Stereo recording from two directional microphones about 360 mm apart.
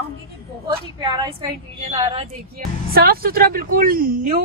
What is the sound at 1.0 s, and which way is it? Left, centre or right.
A woman's voice, centre.